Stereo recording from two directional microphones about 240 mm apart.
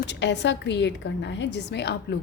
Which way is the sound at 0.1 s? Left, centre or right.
Left.